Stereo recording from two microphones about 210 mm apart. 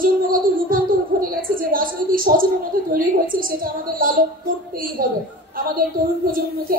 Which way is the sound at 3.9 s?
40° right (ahead or behind).